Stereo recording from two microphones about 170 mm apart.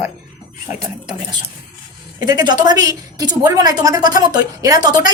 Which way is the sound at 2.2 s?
25° right (ahead or behind).